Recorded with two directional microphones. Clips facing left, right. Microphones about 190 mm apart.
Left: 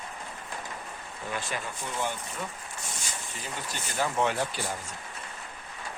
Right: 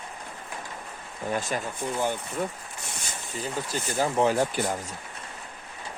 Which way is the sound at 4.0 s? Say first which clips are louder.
Right 4 dB; 35° right (ahead or behind).